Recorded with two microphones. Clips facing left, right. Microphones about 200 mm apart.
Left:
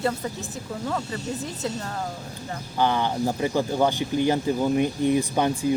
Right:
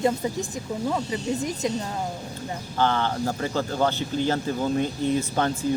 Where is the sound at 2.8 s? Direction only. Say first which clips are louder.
Left 1 dB; 15° left (ahead or behind).